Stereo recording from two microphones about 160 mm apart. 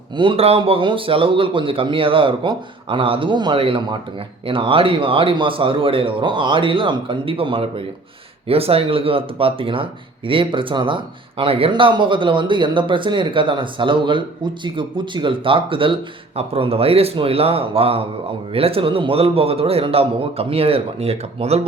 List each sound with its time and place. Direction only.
0.2 s speech: 35° right (ahead or behind)